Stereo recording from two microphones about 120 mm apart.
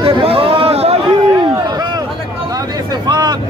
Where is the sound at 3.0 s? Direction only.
35° right (ahead or behind).